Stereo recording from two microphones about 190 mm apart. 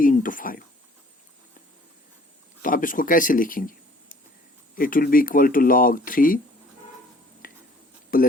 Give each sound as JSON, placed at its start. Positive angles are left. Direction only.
{"t": 0.0, "sound": "speech", "side_deg": 45}
{"t": 2.6, "sound": "speech", "side_deg": 45}
{"t": 7.4, "sound": "a sound", "side_deg": 45}